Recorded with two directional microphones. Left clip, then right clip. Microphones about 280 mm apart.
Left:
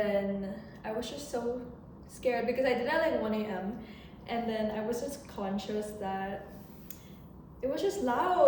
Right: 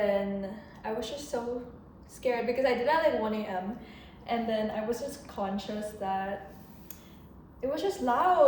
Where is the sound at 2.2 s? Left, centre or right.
Centre.